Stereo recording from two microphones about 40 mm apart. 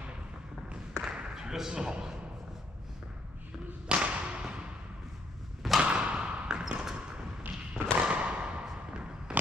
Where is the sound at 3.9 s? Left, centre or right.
Right.